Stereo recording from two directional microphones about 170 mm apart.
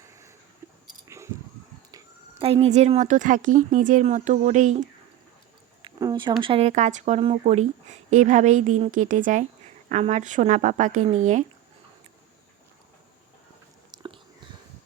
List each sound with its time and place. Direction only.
0.0 s a sound: 15° right (ahead or behind)
2.4 s speech: 35° right (ahead or behind)
5.8 s speech: 25° right (ahead or behind); by 11.4 s 45° right (ahead or behind)
13.9 s biting: 25° right (ahead or behind)